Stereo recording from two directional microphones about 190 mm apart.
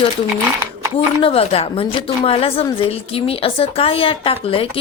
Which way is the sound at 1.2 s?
30° left (ahead or behind).